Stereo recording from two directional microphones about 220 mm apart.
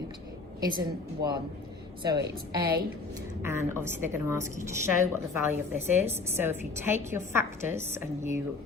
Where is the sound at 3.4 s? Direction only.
10° right (ahead or behind).